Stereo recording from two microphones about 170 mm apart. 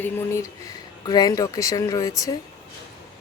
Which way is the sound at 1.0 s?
25° left (ahead or behind).